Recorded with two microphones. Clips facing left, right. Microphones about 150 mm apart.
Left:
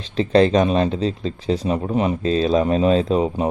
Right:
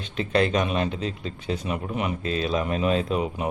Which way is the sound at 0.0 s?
30° left (ahead or behind).